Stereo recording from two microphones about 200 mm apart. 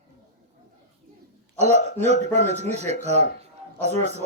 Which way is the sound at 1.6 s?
35° right (ahead or behind).